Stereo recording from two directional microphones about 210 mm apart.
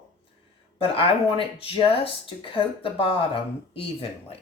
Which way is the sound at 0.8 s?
25° left (ahead or behind).